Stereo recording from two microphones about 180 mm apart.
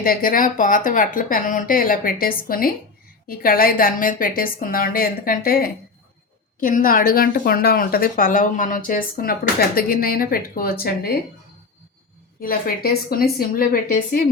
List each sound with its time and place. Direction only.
0.0 s a woman's voice: 50° left (ahead or behind)
12.4 s a woman's voice: 55° left (ahead or behind)